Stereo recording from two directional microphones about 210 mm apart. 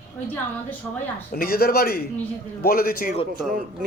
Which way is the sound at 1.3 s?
45° left (ahead or behind).